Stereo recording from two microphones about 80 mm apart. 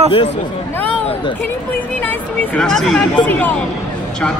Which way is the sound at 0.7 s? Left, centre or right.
Centre.